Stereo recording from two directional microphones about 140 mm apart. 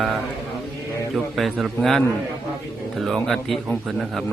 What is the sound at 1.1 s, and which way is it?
Speech, 5° right (ahead or behind).